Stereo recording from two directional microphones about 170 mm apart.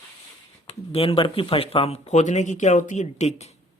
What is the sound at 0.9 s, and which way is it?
Speech, 35° left (ahead or behind).